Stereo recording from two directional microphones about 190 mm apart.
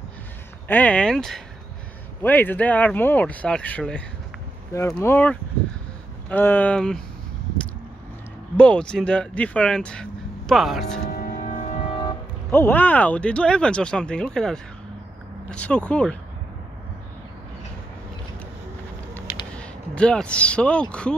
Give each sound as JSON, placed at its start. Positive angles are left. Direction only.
{"t": 0.7, "sound": "speech", "side_deg": 10}
{"t": 8.5, "sound": "speech", "side_deg": 5}
{"t": 11.0, "sound": "music", "side_deg": 50}
{"t": 12.4, "sound": "speech", "side_deg": 10}
{"t": 19.5, "sound": "speech", "side_deg": 5}